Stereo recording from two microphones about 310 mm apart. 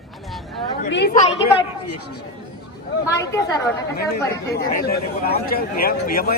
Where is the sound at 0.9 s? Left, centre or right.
Left.